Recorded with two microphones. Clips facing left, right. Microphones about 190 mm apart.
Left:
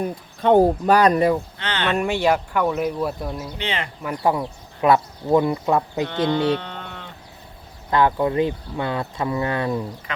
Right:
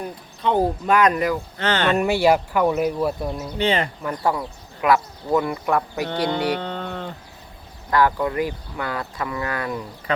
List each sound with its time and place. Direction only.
0.9 s speech: 35° left (ahead or behind)
1.5 s speech: 45° right (ahead or behind)
1.9 s speech: 5° right (ahead or behind)
3.6 s speech: 35° right (ahead or behind)
4.2 s speech: 20° left (ahead or behind)
6.6 s a sound: 35° right (ahead or behind)
7.9 s speech: 20° left (ahead or behind)
10.1 s speech: 35° right (ahead or behind)